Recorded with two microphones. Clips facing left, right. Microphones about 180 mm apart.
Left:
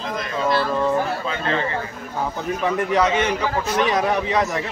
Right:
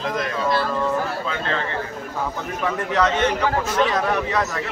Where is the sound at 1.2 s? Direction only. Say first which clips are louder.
Left 2 dB; 5° left (ahead or behind).